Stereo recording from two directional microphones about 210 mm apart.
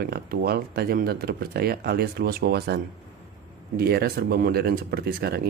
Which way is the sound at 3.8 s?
50° right (ahead or behind).